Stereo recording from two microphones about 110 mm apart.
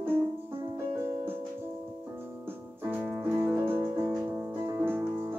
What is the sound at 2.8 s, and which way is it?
Music, 20° right (ahead or behind).